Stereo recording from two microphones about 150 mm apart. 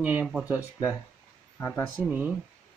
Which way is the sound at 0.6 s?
20° left (ahead or behind).